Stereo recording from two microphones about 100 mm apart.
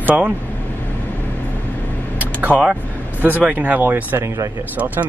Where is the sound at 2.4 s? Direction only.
15° right (ahead or behind).